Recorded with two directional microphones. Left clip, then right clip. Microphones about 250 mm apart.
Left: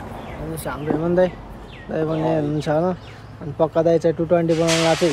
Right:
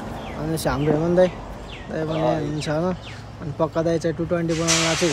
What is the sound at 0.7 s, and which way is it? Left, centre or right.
Speech, right.